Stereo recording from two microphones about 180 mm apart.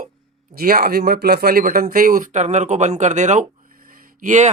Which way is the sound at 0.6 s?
55° right (ahead or behind).